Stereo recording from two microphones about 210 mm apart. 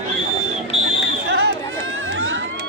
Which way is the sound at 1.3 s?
55° right (ahead or behind).